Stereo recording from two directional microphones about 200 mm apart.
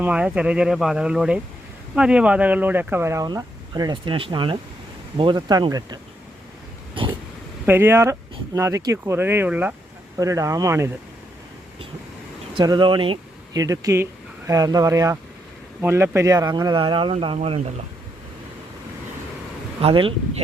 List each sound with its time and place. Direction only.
0.0 s speech: 5° right (ahead or behind)
7.0 s a sound: 25° right (ahead or behind)
7.6 s speech: 10° right (ahead or behind)
12.5 s speech: 25° right (ahead or behind)
19.8 s speech: 25° right (ahead or behind)